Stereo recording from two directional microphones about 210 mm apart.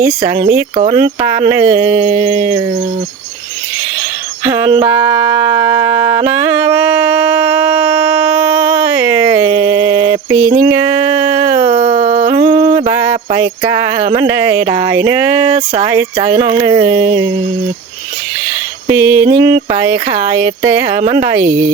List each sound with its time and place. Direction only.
0.8 s speech: 40° right (ahead or behind)
1.5 s speech: 10° right (ahead or behind)
4.4 s music: 15° right (ahead or behind)
9.3 s a sound: 15° right (ahead or behind)
11.5 s dog: 45° right (ahead or behind)
11.9 s a sound: 20° right (ahead or behind)
14.2 s speech: 10° right (ahead or behind)
18.9 s speech: 10° right (ahead or behind)